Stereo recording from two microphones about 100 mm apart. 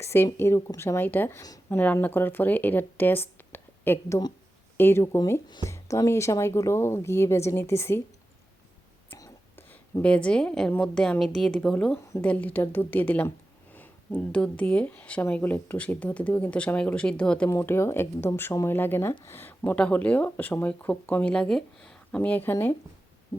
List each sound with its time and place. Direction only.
0.0 s speech: 25° left (ahead or behind)
9.6 s speech: 20° left (ahead or behind)
17.5 s speech: 25° left (ahead or behind)
23.3 s heart sounds: 20° left (ahead or behind)